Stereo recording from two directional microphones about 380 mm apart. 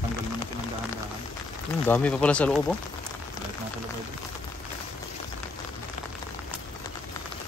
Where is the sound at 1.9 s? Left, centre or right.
Centre.